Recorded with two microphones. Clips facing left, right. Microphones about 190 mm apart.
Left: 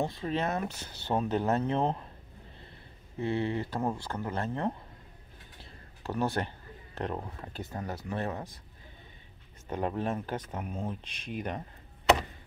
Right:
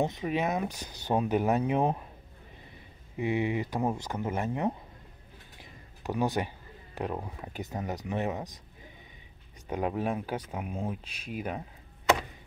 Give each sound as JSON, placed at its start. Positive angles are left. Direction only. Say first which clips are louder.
{"t": 0.0, "sound": "speech", "louder": "right 2 dB", "side_deg": -15}
{"t": 3.2, "sound": "speech", "louder": "right 2 dB", "side_deg": -15}
{"t": 5.6, "sound": "a sound", "louder": "right 1 dB", "side_deg": -15}
{"t": 7.0, "sound": "speech", "louder": "right 1 dB", "side_deg": -10}
{"t": 9.7, "sound": "speech", "louder": "right 1 dB", "side_deg": -10}